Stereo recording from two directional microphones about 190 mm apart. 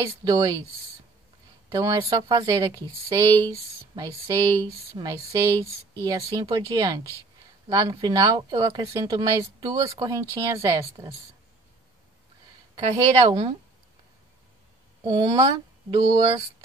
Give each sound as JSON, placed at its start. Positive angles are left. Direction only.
{"t": 0.2, "sound": "speech", "side_deg": -20}
{"t": 1.7, "sound": "speech", "side_deg": -20}
{"t": 12.7, "sound": "speech", "side_deg": -25}
{"t": 15.0, "sound": "speech", "side_deg": -25}